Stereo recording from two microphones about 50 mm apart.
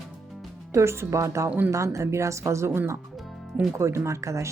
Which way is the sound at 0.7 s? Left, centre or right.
Right.